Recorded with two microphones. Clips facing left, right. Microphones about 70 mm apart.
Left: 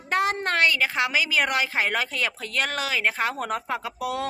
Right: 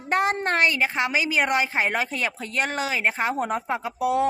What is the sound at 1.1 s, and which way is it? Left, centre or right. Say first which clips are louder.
Speech: right 1 dB; centre.